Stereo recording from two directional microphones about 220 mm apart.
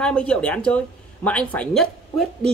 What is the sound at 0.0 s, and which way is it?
Speech, 5° left (ahead or behind).